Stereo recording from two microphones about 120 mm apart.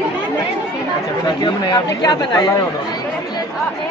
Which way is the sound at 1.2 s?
35° left (ahead or behind).